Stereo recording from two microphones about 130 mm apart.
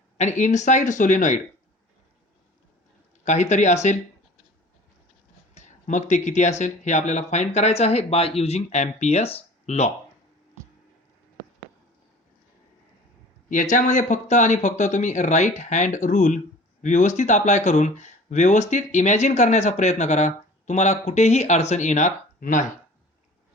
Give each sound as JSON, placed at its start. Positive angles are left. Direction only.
{"t": 0.2, "sound": "speech", "side_deg": 65}
{"t": 3.2, "sound": "speech", "side_deg": 65}
{"t": 5.5, "sound": "speech", "side_deg": 70}
{"t": 13.5, "sound": "speech", "side_deg": 90}